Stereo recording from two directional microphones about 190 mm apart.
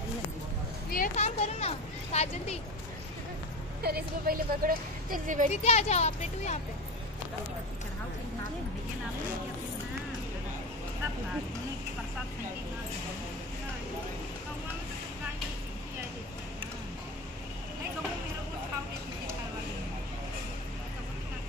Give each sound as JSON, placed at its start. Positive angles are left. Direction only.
{"t": 0.9, "sound": "a sound", "side_deg": 40}
{"t": 3.8, "sound": "a woman's voice", "side_deg": -50}
{"t": 5.5, "sound": "speech", "side_deg": 35}